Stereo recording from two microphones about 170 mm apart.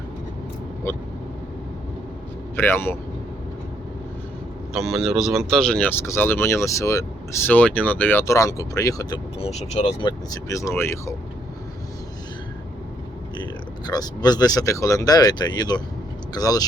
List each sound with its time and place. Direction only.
0.9 s speech: 15° left (ahead or behind)
2.6 s speech: 15° left (ahead or behind)
4.7 s speech: centre (ahead or behind); by 9.5 s 25° left (ahead or behind)
9.5 s speech: 40° left (ahead or behind)
10.0 s speech: 25° left (ahead or behind)
13.4 s speech: 25° left (ahead or behind)